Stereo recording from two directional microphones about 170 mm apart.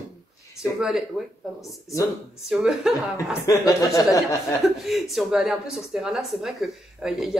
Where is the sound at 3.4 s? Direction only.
20° left (ahead or behind).